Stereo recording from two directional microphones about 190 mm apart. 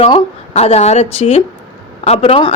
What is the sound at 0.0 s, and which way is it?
Speech, 30° left (ahead or behind).